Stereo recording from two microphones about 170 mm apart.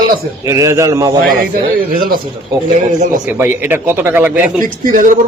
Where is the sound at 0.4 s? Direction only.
20° right (ahead or behind).